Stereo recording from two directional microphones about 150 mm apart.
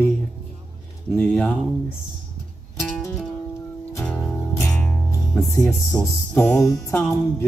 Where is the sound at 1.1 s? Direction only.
10° left (ahead or behind).